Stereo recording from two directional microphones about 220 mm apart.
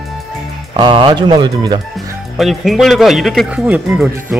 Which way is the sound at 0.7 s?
20° right (ahead or behind).